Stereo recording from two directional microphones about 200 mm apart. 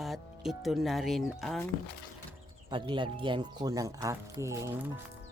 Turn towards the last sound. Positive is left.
turn(degrees=-10)  # may be behind; listen again after turning